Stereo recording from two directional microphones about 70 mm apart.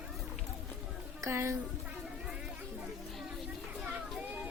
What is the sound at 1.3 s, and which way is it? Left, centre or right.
Speech, right.